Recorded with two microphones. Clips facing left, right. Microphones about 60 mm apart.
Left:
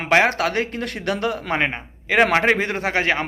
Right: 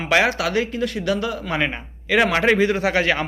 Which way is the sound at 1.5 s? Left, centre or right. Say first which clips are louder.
Left 1 dB; left.